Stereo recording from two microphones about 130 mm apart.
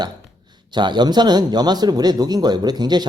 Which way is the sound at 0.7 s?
35° right (ahead or behind).